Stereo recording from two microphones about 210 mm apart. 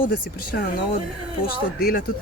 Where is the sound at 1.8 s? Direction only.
45° left (ahead or behind).